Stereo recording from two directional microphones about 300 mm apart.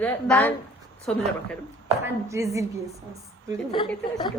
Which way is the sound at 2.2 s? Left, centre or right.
Centre.